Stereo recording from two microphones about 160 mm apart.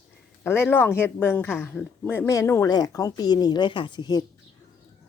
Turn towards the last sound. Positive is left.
turn(degrees=25)  # may be behind; listen again after turning